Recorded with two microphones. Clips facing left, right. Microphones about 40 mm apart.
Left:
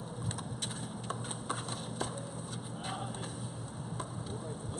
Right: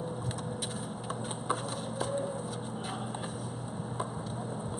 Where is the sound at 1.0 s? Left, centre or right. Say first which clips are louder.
Right 5 dB; centre.